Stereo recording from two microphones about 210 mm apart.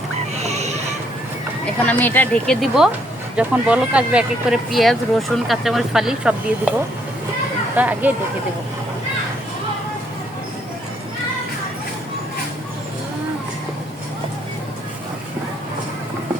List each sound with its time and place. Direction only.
0.4 s a sound: 30° right (ahead or behind)
1.8 s speech: 10° left (ahead or behind)
7.8 s speech: 5° right (ahead or behind)